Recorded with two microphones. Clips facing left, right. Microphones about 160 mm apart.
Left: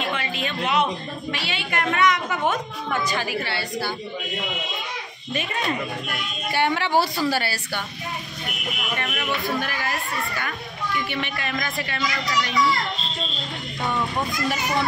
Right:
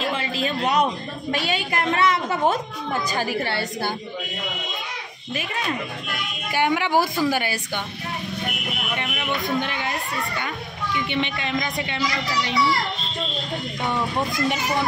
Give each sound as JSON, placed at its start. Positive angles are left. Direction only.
{"t": 0.0, "sound": "a sound", "side_deg": -30}
{"t": 1.3, "sound": "a woman's voice", "side_deg": -40}
{"t": 5.3, "sound": "a woman's voice", "side_deg": -5}
{"t": 8.9, "sound": "speech", "side_deg": -15}